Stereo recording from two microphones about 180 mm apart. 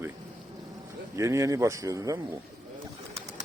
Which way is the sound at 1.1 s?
15° right (ahead or behind).